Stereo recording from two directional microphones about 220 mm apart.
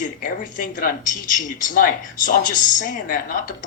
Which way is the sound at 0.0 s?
35° left (ahead or behind).